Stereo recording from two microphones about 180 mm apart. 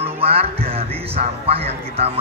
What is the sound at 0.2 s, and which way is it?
Music, 35° right (ahead or behind).